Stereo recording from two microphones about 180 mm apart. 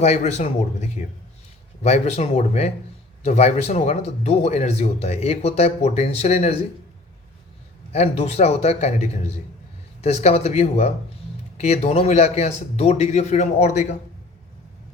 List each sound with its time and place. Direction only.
0.0 s speech: 40° left (ahead or behind)
7.9 s speech: 35° left (ahead or behind)